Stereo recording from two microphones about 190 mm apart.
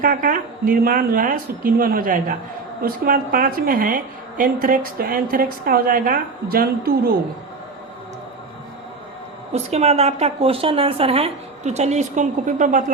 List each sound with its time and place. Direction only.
0.0 s a woman's voice: 45° right (ahead or behind)
9.5 s a woman's voice: 35° right (ahead or behind)